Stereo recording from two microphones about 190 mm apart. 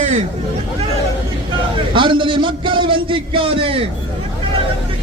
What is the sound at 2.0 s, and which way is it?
A man's voice, 25° right (ahead or behind).